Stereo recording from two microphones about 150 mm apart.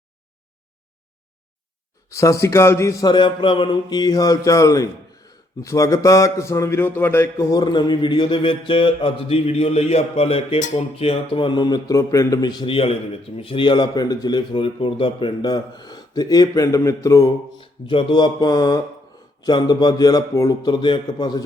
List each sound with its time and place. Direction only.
2.0 s a man's voice: 20° left (ahead or behind); by 10.8 s 50° left (ahead or behind)
10.9 s a man's voice: 40° left (ahead or behind); by 17.3 s 20° left (ahead or behind)
17.6 s a man's voice: 35° left (ahead or behind)